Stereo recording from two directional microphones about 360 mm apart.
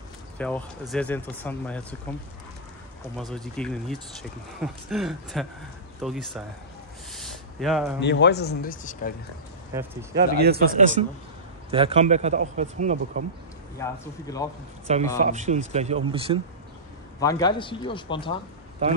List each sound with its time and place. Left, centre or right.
0.4 s speech: centre
3.2 s speech: centre
7.1 s a sound: centre
8.0 s speech: left
10.1 s a man's voice: right
13.7 s speech: centre
15.1 s a man's voice: centre
17.2 s speech: centre